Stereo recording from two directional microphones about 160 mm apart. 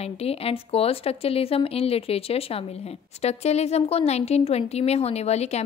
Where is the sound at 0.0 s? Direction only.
40° left (ahead or behind).